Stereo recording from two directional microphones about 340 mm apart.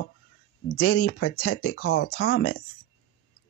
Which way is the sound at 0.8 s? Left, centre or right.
Left.